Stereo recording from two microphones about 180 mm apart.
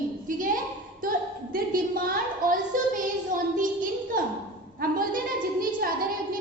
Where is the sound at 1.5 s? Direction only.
50° right (ahead or behind).